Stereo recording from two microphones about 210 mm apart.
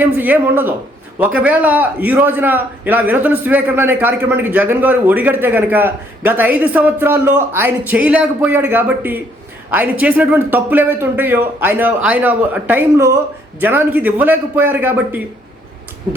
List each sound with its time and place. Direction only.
0.0 s a man's voice: 10° right (ahead or behind)